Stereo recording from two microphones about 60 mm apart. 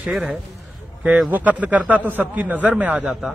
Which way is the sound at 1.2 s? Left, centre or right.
Right.